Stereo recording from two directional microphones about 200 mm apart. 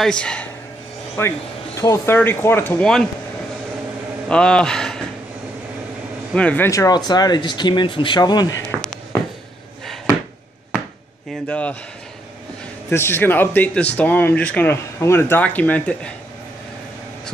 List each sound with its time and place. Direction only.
0.0 s a man's voice: 5° left (ahead or behind)
4.3 s a man's voice: 5° left (ahead or behind)
6.3 s speech: 5° left (ahead or behind)
11.4 s speech: 5° left (ahead or behind)
12.9 s speech: 10° left (ahead or behind)